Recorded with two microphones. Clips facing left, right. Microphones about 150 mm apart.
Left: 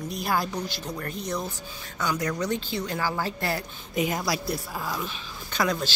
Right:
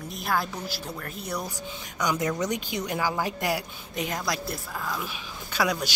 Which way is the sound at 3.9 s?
Centre (ahead or behind).